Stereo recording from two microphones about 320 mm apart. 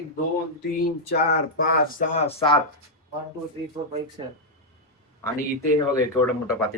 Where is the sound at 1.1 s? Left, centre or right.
Left.